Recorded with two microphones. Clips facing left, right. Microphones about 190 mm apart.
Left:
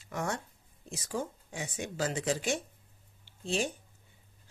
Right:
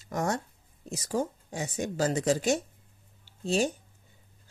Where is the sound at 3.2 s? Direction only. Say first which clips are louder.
Right 5 dB; 40° right (ahead or behind).